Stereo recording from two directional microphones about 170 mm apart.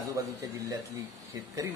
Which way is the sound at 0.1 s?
20° right (ahead or behind).